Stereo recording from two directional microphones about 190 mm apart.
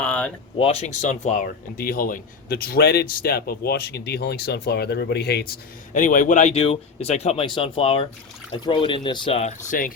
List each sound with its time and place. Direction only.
0.0 s a sound: 5° left (ahead or behind)
0.6 s speech: 30° left (ahead or behind); by 5.5 s 60° left (ahead or behind)
5.9 s speech: 40° left (ahead or behind)